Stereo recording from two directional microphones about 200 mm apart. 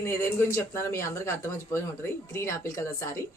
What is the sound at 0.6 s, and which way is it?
Speech, 15° left (ahead or behind).